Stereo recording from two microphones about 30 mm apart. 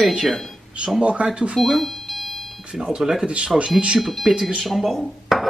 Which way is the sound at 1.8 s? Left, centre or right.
Centre.